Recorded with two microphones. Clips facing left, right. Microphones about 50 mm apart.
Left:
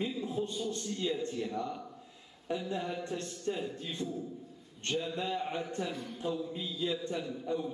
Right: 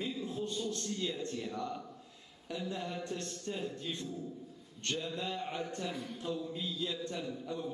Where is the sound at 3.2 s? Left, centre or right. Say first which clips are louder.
Left 3 dB; centre.